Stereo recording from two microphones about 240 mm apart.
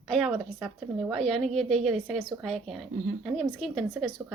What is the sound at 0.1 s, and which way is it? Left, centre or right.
A woman's voice, centre.